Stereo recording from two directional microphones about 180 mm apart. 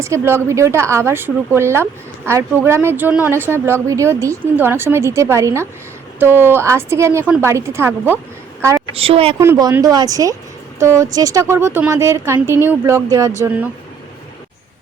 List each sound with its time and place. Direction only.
0.0 s a woman's voice: 15° right (ahead or behind)
9.0 s a woman's voice: 30° right (ahead or behind)
9.4 s a woman's voice: 20° right (ahead or behind)